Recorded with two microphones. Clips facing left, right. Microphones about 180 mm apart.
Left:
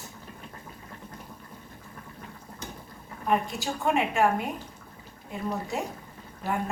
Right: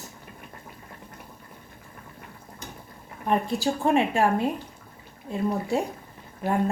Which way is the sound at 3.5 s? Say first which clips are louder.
Right 5 dB; 35° right (ahead or behind).